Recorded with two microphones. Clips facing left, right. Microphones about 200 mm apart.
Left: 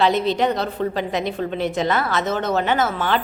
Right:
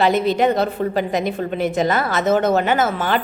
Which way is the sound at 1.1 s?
50° right (ahead or behind).